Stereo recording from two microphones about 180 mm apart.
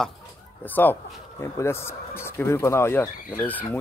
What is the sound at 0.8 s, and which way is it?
Speech, 15° left (ahead or behind).